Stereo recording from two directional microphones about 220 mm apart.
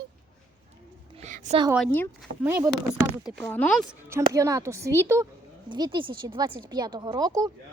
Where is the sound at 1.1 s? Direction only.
30° right (ahead or behind).